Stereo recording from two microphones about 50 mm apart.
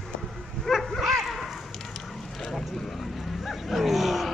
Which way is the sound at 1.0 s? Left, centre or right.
Centre.